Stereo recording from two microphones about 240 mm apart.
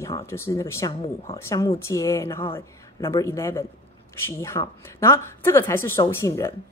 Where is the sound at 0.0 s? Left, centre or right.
Centre.